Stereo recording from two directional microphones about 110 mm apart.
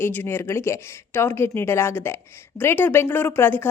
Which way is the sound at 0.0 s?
20° left (ahead or behind).